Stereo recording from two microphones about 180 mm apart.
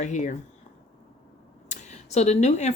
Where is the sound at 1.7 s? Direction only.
40° left (ahead or behind).